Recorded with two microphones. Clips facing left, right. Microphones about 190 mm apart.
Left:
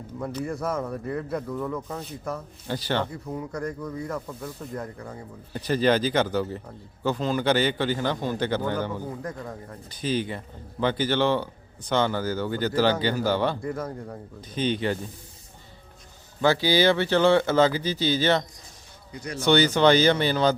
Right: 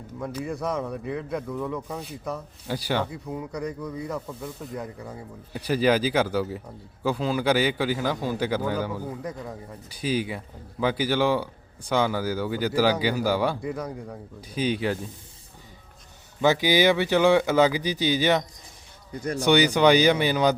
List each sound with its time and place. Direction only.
0.2 s speech: centre (ahead or behind)
16.4 s speech: 15° right (ahead or behind)
19.2 s speech: 50° right (ahead or behind)
19.5 s speech: 15° right (ahead or behind)